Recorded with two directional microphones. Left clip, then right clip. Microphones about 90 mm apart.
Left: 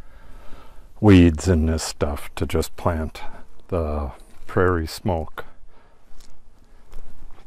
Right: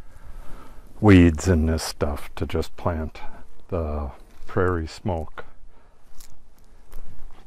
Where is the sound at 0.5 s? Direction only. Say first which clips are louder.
Right 1 dB; 20° left (ahead or behind).